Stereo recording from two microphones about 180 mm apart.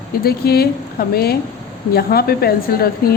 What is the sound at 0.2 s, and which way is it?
A woman's voice, 60° left (ahead or behind).